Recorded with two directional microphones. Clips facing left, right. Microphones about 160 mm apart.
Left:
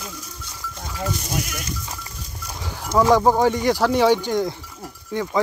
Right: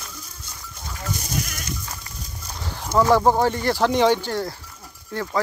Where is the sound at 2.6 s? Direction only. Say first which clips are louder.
Left 1 dB; 10° left (ahead or behind).